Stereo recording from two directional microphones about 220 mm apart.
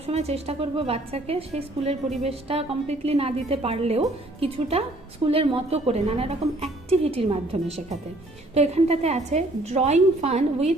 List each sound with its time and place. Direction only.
0.0 s a woman's voice: 30° right (ahead or behind)
8.5 s a woman's voice: 30° right (ahead or behind)